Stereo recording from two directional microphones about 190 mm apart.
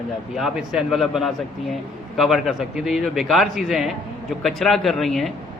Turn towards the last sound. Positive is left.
turn(degrees=0)  # may be behind; listen again after turning